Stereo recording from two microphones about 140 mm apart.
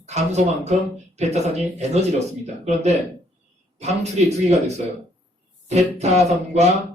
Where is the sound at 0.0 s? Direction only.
55° right (ahead or behind).